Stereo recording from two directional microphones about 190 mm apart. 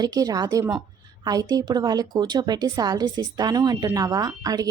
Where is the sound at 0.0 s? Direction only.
20° right (ahead or behind).